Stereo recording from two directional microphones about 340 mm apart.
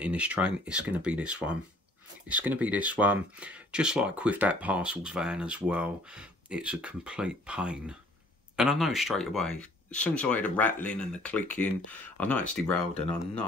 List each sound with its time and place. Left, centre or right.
0.0 s speech: centre
12.9 s speech: centre